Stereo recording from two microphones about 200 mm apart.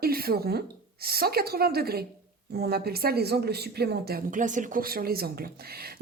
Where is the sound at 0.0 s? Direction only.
50° right (ahead or behind).